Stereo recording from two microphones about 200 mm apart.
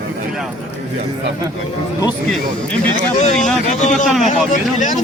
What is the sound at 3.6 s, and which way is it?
Speech, 35° left (ahead or behind).